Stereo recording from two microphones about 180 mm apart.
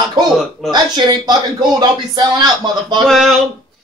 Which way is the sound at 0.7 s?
25° right (ahead or behind).